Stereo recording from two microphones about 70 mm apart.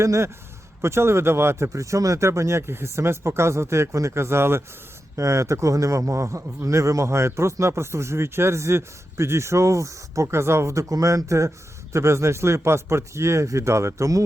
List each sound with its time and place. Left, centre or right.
0.0 s speech: right